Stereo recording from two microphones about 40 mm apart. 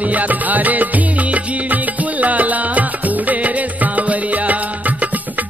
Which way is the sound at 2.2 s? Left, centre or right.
Right.